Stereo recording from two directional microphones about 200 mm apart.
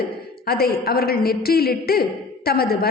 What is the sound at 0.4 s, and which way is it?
A woman's voice, 50° left (ahead or behind).